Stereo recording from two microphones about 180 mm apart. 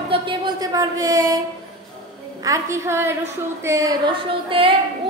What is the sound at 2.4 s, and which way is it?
A woman's voice, 20° right (ahead or behind).